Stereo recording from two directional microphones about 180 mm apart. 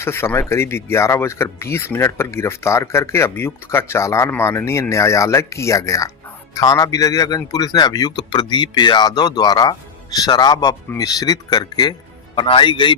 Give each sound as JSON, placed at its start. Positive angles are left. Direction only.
{"t": 0.0, "sound": "speech", "side_deg": 15}